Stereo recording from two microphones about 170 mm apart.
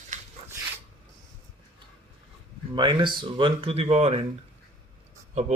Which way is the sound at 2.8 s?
25° right (ahead or behind).